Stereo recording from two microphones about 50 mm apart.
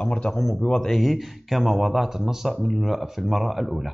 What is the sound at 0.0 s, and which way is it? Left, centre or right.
Speech, left.